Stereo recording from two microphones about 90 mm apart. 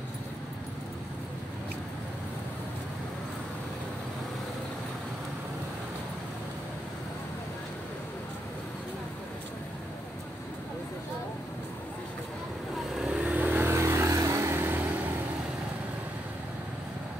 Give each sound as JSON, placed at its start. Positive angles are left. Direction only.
{"t": 12.9, "sound": "vehicle", "side_deg": -10}